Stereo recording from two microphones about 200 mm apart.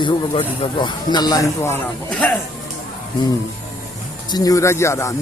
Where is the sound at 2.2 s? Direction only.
10° left (ahead or behind).